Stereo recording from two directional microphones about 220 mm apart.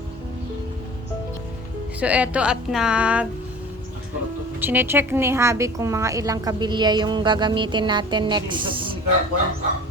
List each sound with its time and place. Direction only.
2.0 s speech: 5° right (ahead or behind)
4.6 s a woman's voice: 10° right (ahead or behind)